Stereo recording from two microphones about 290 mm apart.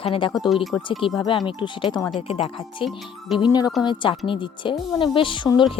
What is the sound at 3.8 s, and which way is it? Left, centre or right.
Speech, centre.